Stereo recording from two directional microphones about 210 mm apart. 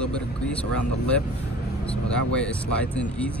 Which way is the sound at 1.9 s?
5° left (ahead or behind).